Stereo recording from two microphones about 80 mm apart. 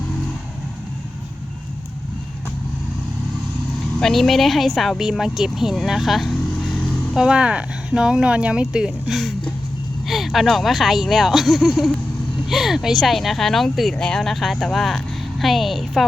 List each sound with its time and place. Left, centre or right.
4.0 s a woman's voice: centre
7.2 s speech: centre
10.1 s vehicle: centre
10.4 s speech: centre